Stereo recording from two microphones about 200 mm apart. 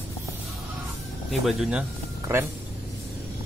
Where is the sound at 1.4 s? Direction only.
Centre (ahead or behind).